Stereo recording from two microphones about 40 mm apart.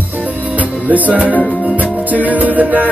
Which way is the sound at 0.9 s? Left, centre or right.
Right.